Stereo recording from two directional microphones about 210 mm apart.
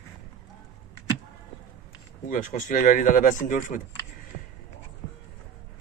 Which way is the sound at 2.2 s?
40° left (ahead or behind).